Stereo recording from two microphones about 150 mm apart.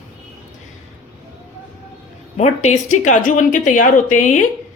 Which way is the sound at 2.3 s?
50° left (ahead or behind).